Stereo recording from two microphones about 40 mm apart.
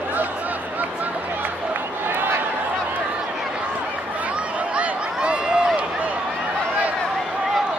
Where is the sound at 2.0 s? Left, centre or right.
Right.